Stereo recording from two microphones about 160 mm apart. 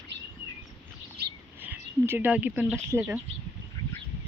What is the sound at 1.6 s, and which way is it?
Speech, 10° right (ahead or behind).